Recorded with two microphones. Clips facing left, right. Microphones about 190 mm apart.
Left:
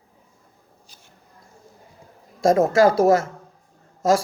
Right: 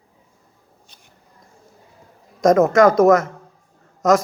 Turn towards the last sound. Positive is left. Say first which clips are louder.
# right 3 dB
turn(degrees=30)  # may be behind; listen again after turning